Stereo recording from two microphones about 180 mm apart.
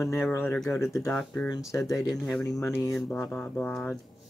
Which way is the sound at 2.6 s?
15° left (ahead or behind).